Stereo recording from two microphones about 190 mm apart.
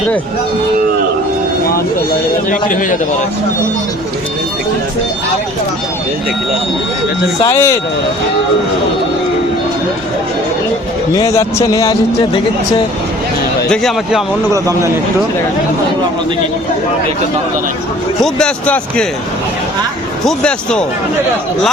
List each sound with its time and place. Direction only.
2.5 s a man's voice: 45° left (ahead or behind)
7.4 s speech: 15° left (ahead or behind)
11.1 s speech: 15° left (ahead or behind)
13.7 s speech: centre (ahead or behind)
14.5 s speech: 15° right (ahead or behind)
18.2 s speech: 5° left (ahead or behind)
20.2 s speech: 5° left (ahead or behind)